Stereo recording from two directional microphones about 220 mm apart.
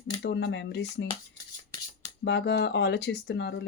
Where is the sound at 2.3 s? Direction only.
50° left (ahead or behind).